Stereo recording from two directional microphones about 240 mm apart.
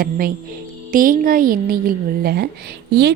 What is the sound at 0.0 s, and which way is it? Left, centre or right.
A woman's voice, right.